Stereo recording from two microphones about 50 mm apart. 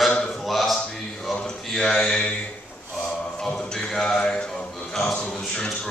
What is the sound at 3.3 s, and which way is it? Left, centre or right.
A capella, centre.